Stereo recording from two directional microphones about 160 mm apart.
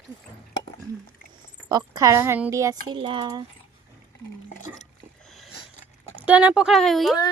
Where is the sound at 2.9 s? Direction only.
30° right (ahead or behind).